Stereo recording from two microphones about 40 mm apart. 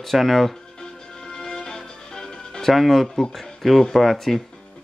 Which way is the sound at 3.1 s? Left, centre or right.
Centre.